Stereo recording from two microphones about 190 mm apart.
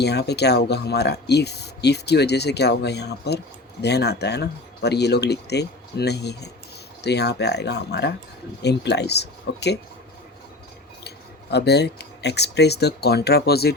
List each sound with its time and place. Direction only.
0.0 s speech: 60° left (ahead or behind)
11.5 s speech: 60° left (ahead or behind)